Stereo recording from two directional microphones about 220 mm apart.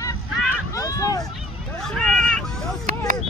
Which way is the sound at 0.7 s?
15° left (ahead or behind).